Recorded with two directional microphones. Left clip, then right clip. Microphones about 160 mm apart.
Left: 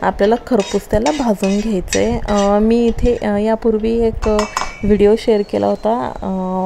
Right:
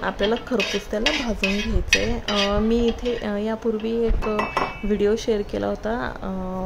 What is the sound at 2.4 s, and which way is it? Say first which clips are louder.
A woman's voice: left 8 dB; 30° left (ahead or behind).